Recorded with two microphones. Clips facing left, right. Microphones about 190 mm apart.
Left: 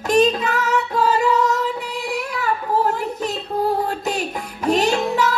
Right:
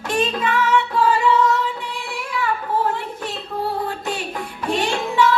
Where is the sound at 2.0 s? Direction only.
40° left (ahead or behind).